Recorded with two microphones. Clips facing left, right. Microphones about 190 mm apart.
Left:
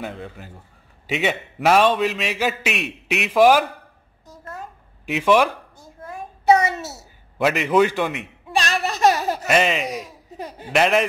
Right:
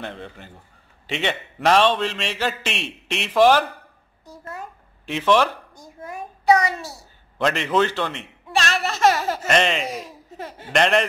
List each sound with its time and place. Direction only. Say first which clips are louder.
0.0 s a man's voice: left 2 dB; centre (ahead or behind)
4.3 s a sound: right 1 dB; 10° right (ahead or behind)
5.0 s a man's voice: left 2 dB; 5° left (ahead or behind)
5.8 s a sound: right 1 dB; 15° right (ahead or behind)
6.4 s a child's voice: left 1 dB; 25° left (ahead or behind)
7.3 s a sound: left 3 dB; 5° left (ahead or behind)
9.5 s speech: left 1 dB; 5° left (ahead or behind)
10.3 s speech: left 2 dB; 15° left (ahead or behind)
10.7 s speech: left 1 dB; 5° left (ahead or behind)